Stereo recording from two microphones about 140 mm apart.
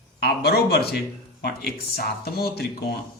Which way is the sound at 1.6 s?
90° left.